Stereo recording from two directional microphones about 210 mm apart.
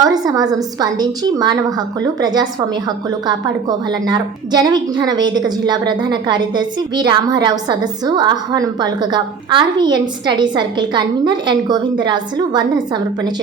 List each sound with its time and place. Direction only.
0.0 s a woman's voice: 20° right (ahead or behind)